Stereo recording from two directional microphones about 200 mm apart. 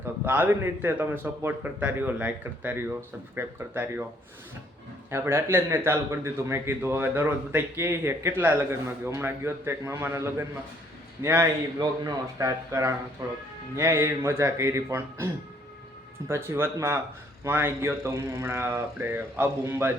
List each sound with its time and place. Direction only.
0.3 s a man's voice: 10° right (ahead or behind)
5.1 s a man's voice: 10° right (ahead or behind)
16.3 s a man's voice: 10° right (ahead or behind)